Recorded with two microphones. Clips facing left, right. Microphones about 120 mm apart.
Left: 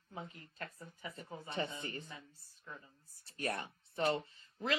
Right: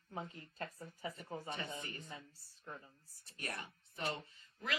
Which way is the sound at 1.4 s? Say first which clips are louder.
Left 8 dB; 30° left (ahead or behind).